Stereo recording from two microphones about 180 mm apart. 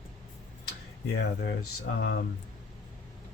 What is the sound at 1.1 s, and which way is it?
Speech, 65° left (ahead or behind).